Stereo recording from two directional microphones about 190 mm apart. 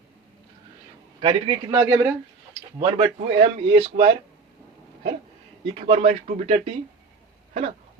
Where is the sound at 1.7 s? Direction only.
15° right (ahead or behind).